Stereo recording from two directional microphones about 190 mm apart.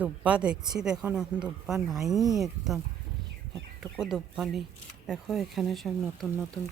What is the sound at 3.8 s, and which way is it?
Speech, centre (ahead or behind).